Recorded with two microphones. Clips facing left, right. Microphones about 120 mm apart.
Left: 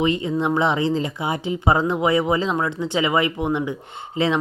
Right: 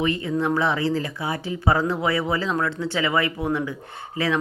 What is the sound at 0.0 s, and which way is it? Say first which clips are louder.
Speech: left 2 dB; 20° left (ahead or behind).